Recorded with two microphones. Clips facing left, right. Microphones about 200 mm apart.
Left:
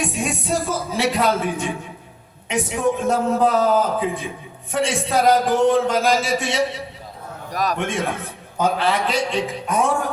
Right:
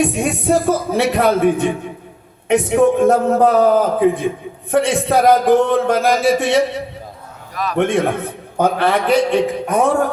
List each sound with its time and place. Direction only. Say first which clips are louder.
0.0 s speech: right 7 dB; 60° right (ahead or behind)
7.5 s a man's voice: left 1 dB; 40° left (ahead or behind)
7.8 s speech: right 8 dB; 60° right (ahead or behind)